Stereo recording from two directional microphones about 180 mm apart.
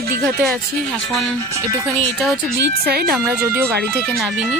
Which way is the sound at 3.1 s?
10° right (ahead or behind).